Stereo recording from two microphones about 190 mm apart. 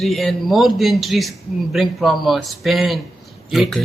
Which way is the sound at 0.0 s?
Centre (ahead or behind).